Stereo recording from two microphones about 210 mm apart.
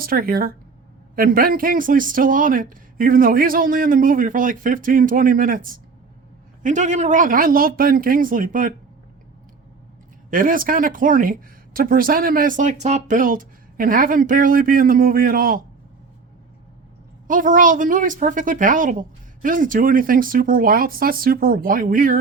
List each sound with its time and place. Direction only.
0.0 s speech: 45° right (ahead or behind)
10.2 s speech: 40° right (ahead or behind)
17.2 s speech: 40° right (ahead or behind)